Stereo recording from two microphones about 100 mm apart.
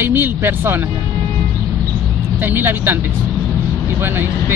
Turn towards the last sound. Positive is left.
turn(degrees=-20)  # may be behind; listen again after turning